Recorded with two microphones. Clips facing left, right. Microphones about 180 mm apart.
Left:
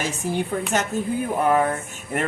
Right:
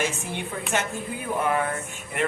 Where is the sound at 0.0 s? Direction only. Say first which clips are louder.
Left 4 dB; 40° left (ahead or behind).